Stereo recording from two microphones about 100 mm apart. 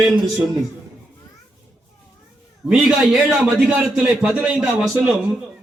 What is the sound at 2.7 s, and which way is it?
A man's voice, 10° right (ahead or behind).